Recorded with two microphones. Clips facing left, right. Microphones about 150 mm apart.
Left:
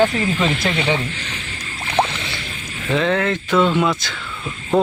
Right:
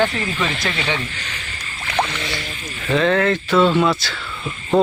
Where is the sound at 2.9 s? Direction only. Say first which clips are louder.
Right 2 dB; 15° left (ahead or behind).